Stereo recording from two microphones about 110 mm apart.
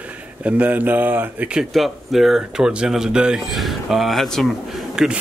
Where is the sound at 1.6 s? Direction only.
Centre (ahead or behind).